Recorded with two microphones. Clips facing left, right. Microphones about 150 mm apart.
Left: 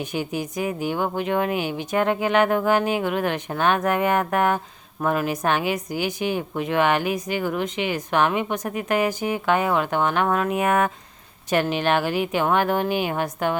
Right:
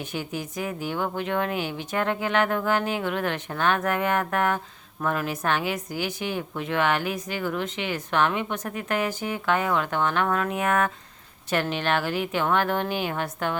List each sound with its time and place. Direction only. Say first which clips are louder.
0.0 s speech: left 5 dB; 15° left (ahead or behind)